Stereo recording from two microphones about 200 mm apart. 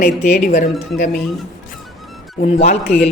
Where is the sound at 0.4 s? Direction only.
40° left (ahead or behind).